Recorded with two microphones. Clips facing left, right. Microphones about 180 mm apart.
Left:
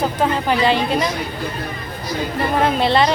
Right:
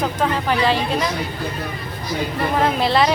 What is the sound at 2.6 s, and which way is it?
Speech, centre (ahead or behind).